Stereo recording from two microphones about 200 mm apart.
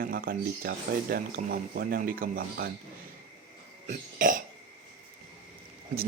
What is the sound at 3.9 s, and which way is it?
Cough, 40° right (ahead or behind).